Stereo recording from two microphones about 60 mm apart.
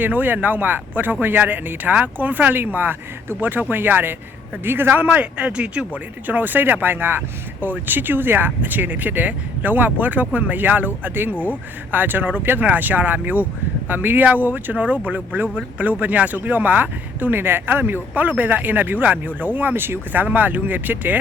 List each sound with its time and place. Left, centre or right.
0.0 s speech: right
5.0 s speech: right
20.2 s speech: right